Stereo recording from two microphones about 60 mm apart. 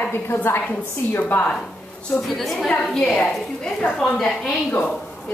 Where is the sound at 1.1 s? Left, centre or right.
Left.